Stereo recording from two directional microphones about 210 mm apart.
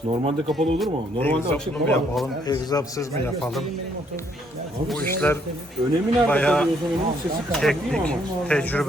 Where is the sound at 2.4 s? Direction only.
20° left (ahead or behind).